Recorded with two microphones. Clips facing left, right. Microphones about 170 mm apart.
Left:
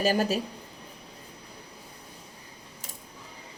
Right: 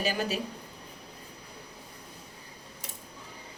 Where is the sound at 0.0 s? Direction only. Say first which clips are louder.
Left 6 dB; 45° left (ahead or behind).